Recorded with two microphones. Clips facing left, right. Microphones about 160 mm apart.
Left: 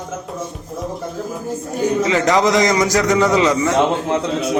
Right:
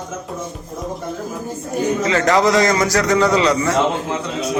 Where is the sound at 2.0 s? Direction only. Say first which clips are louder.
Even; 15° left (ahead or behind).